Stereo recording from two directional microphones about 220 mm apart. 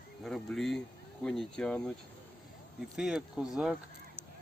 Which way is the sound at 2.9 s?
Centre (ahead or behind).